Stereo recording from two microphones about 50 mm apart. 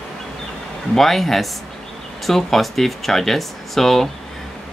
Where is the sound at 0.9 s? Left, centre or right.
Centre.